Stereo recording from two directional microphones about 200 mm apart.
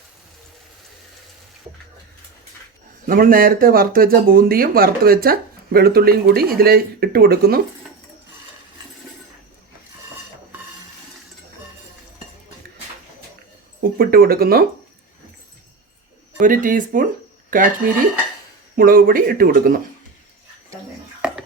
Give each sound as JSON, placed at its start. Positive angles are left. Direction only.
{"t": 3.1, "sound": "speech", "side_deg": -45}
{"t": 14.0, "sound": "speech", "side_deg": -50}
{"t": 16.4, "sound": "speech", "side_deg": -40}
{"t": 18.8, "sound": "speech", "side_deg": -45}